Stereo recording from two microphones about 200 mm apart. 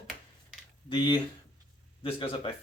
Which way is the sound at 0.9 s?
25° left (ahead or behind).